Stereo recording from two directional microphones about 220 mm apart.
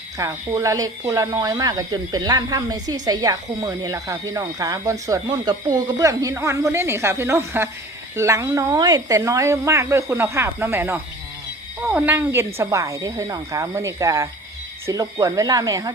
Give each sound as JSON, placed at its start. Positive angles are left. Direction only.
{"t": 0.2, "sound": "speech", "side_deg": -15}